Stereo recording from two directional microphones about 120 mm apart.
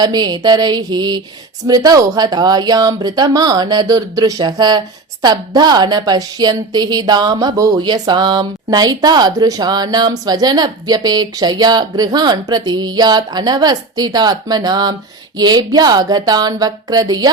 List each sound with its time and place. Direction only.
0.0 s a woman's voice: 35° right (ahead or behind)